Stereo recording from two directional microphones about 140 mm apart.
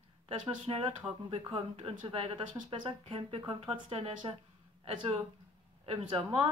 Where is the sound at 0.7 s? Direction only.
40° right (ahead or behind).